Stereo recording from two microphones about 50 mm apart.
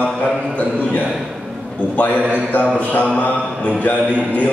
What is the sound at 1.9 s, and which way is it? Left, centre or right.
Speech, left.